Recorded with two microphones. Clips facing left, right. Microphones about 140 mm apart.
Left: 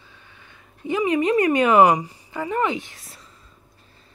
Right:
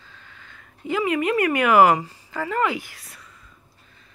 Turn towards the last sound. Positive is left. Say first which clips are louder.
# even
turn(degrees=30)  # may be behind; listen again after turning